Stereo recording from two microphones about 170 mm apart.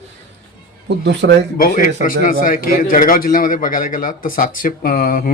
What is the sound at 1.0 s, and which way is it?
Speech, 90° right.